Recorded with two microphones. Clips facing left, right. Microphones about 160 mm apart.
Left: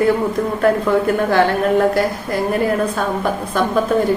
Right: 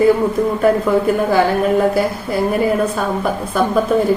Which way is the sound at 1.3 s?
5° right (ahead or behind).